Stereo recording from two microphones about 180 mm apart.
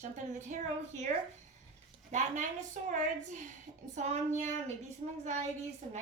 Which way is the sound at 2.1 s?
40° right (ahead or behind).